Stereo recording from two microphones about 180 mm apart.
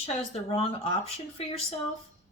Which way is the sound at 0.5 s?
30° left (ahead or behind).